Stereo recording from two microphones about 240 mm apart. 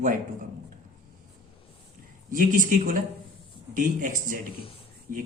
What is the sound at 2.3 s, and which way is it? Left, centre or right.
Speech, right.